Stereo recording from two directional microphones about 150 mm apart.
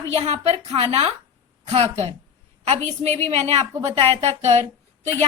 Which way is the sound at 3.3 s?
45° right (ahead or behind).